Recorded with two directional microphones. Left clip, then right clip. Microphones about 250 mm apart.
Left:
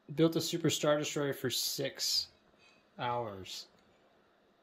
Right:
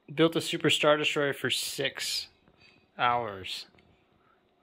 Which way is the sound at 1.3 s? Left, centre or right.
Centre.